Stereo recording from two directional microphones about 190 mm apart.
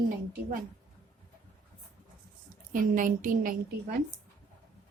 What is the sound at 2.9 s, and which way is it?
A woman's voice, 45° right (ahead or behind).